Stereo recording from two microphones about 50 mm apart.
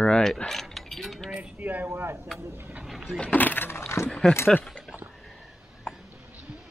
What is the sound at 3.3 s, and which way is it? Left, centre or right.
Speech, left.